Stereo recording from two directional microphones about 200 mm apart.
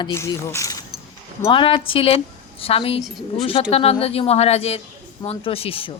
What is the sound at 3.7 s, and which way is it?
A woman's voice, 30° left (ahead or behind).